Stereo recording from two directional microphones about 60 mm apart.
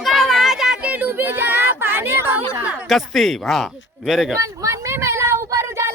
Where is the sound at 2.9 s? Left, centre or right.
Centre.